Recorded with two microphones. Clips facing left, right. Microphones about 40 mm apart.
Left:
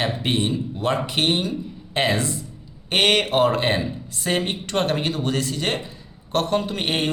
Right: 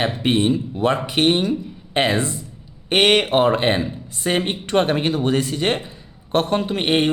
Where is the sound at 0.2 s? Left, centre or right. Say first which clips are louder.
Right 5 dB; centre.